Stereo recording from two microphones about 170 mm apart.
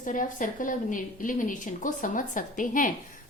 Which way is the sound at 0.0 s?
50° left (ahead or behind).